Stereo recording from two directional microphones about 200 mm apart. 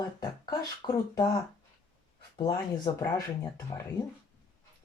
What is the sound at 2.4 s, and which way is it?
Speech, 20° left (ahead or behind).